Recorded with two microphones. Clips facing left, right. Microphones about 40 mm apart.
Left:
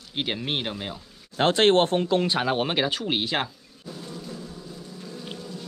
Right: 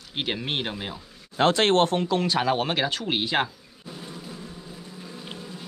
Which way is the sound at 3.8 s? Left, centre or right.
Right.